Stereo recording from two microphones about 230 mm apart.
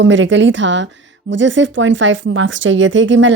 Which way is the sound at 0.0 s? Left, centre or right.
Right.